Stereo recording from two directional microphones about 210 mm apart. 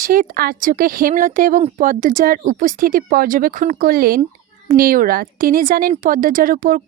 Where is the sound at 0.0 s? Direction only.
40° right (ahead or behind).